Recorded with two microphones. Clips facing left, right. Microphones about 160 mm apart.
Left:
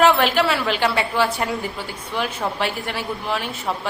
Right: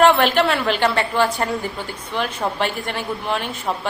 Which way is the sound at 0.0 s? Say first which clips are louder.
Right 2 dB; 5° left (ahead or behind).